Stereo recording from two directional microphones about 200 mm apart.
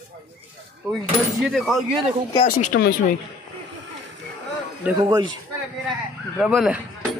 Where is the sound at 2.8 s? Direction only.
50° left (ahead or behind).